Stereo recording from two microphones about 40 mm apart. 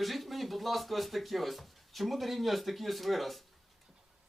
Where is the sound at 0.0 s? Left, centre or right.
Centre.